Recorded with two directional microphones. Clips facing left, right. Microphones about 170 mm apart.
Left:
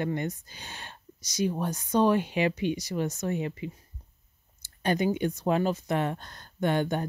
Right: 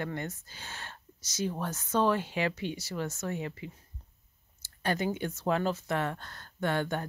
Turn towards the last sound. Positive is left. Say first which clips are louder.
# left 4 dB
turn(degrees=15)  # may be behind; listen again after turning